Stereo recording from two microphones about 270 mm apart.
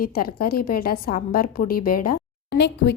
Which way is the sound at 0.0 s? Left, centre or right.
Left.